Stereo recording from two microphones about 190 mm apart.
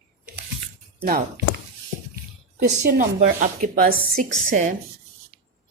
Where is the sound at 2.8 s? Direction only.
55° right (ahead or behind).